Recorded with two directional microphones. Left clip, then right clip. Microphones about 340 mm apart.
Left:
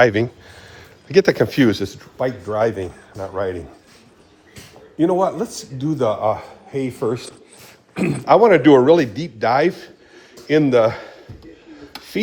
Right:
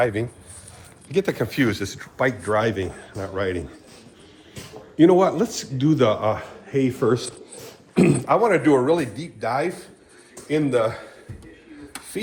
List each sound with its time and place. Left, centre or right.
0.0 s a man's voice: left
2.0 s speech: centre
2.6 s a man's voice: centre
4.9 s a man's voice: centre
5.4 s a man's voice: centre
7.0 s a man's voice: centre
8.3 s a man's voice: left